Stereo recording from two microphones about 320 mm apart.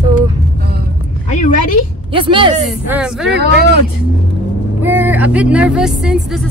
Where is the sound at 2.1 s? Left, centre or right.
Centre.